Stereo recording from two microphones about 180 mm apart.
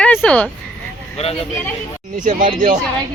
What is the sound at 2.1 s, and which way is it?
Speech, 45° right (ahead or behind).